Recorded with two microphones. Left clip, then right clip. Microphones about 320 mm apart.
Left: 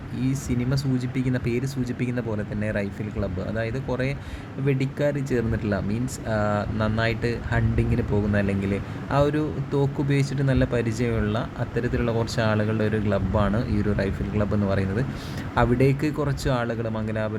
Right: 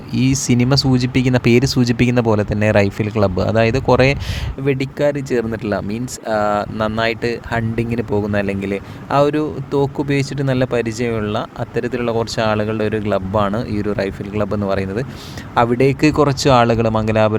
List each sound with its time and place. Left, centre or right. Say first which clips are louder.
0.1 s speech: right 11 dB; right